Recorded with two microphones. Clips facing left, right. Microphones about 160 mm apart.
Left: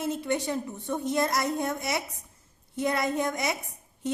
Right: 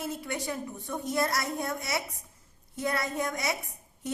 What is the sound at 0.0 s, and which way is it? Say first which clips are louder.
A woman's voice: left 6 dB; 20° left (ahead or behind).